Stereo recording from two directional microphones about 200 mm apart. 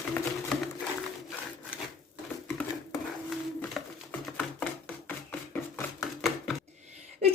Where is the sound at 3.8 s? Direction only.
Centre (ahead or behind).